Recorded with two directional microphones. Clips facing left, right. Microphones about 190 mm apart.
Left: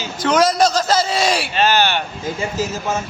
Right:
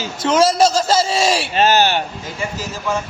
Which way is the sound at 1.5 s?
40° right (ahead or behind).